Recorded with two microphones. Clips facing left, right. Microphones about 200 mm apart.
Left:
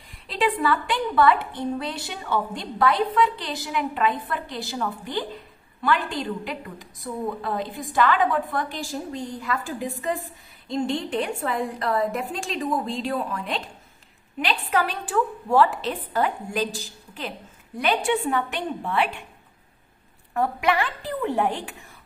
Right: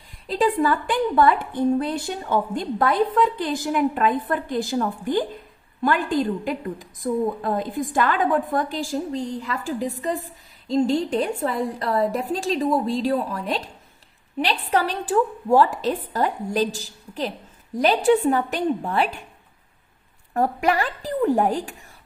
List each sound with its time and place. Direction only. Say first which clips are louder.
0.3 s a woman's voice: right 3 dB; 45° right (ahead or behind)
20.3 s a woman's voice: right 2 dB; 40° right (ahead or behind)